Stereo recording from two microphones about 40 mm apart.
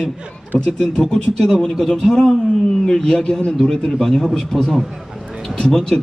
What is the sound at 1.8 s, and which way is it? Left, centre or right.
Speech, centre.